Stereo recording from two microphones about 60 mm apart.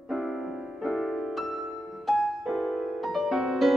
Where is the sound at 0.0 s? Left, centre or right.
Centre.